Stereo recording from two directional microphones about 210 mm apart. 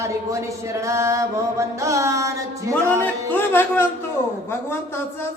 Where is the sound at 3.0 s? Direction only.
10° left (ahead or behind).